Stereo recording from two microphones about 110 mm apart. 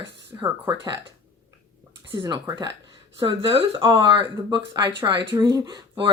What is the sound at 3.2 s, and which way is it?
Speech, 50° right (ahead or behind).